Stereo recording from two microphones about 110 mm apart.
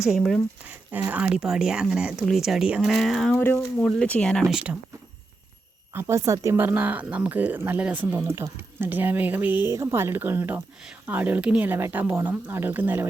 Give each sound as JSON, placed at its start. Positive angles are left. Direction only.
{"t": 0.1, "sound": "speech", "side_deg": 0}
{"t": 0.9, "sound": "speech", "side_deg": -15}
{"t": 3.3, "sound": "speech", "side_deg": 20}
{"t": 4.5, "sound": "speech", "side_deg": -10}
{"t": 5.9, "sound": "speech", "side_deg": -25}